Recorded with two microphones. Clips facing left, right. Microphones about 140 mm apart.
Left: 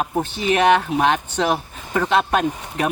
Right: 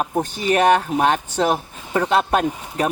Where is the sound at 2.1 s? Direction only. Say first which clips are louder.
Even; 35° right (ahead or behind).